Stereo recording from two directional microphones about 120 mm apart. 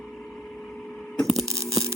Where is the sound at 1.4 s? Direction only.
25° right (ahead or behind).